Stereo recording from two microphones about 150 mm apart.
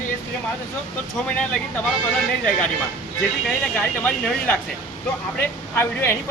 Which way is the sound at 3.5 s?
10° left (ahead or behind).